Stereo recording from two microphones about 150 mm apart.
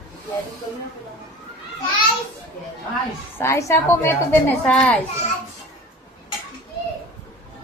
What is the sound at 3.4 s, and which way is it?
A woman's voice, 20° left (ahead or behind).